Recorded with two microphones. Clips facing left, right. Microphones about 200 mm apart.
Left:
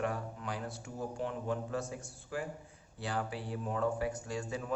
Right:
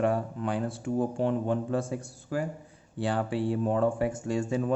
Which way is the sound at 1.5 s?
30° right (ahead or behind).